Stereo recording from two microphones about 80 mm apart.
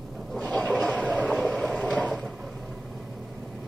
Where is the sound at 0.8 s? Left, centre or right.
Centre.